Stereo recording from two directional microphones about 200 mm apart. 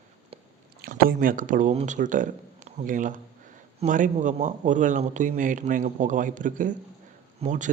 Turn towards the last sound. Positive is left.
turn(degrees=-40)  # may be behind; listen again after turning